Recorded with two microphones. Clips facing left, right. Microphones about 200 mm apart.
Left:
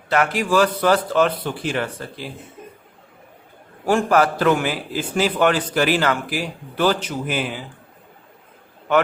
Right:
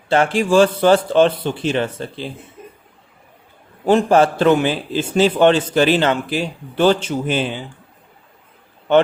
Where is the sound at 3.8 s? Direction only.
20° right (ahead or behind).